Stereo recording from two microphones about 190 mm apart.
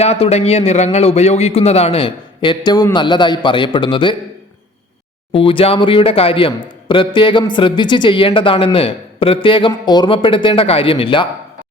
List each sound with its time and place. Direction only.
0.0 s speech: 35° left (ahead or behind)
5.3 s speech: 30° left (ahead or behind)